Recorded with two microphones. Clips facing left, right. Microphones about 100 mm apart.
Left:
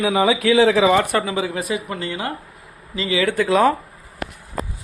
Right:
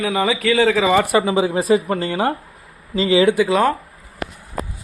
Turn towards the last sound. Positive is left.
turn(degrees=0)  # may be behind; listen again after turning